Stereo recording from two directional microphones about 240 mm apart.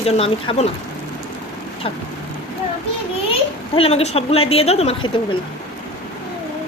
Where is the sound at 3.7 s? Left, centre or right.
Left.